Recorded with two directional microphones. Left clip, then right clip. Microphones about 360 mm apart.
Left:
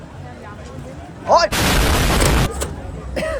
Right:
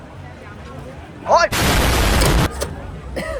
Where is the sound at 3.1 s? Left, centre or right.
Centre.